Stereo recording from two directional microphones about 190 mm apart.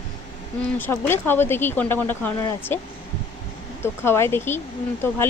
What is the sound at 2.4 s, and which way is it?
Speech, 20° left (ahead or behind).